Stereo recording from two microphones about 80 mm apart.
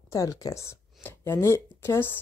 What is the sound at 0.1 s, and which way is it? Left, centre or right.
Speech, left.